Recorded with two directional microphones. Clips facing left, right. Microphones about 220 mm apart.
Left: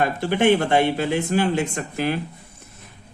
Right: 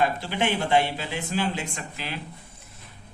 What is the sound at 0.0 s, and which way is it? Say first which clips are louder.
Speech: left 6 dB; 55° left (ahead or behind).